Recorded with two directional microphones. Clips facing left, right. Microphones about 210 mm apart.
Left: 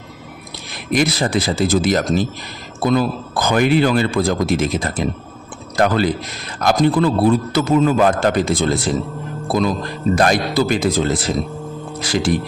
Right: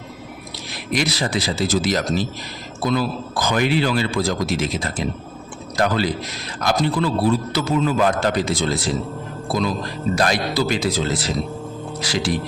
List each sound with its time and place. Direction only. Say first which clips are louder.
0.9 s a man's voice: left 5 dB; 50° left (ahead or behind)